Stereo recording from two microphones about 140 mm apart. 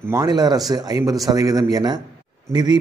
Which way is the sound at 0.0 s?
20° right (ahead or behind).